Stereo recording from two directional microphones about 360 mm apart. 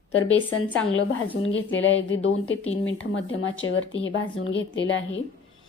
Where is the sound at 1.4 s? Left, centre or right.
Left.